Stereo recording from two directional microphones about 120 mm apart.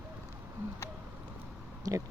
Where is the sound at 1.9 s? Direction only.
30° right (ahead or behind).